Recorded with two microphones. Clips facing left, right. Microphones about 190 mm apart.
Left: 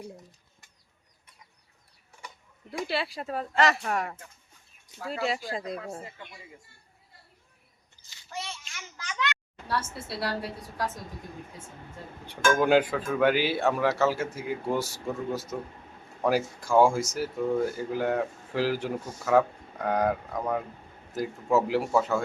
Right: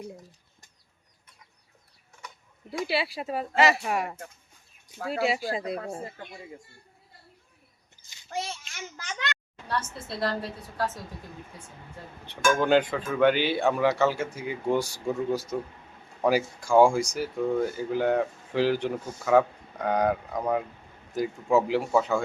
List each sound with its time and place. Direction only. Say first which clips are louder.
2.6 s speech: right 2 dB; 5° right (ahead or behind)
4.9 s speech: right 4 dB; 55° right (ahead or behind)
5.5 s speech: right 3 dB; 5° right (ahead or behind)
8.4 s a sound: right 5 dB; 35° right (ahead or behind)
9.6 s a woman's voice: even; 5° left (ahead or behind)
12.2 s a woman's voice: left 1 dB; 10° left (ahead or behind)